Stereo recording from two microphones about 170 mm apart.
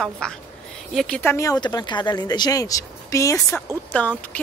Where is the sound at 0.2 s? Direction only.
5° left (ahead or behind).